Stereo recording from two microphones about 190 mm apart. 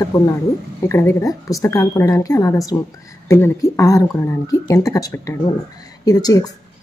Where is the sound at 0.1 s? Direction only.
15° left (ahead or behind).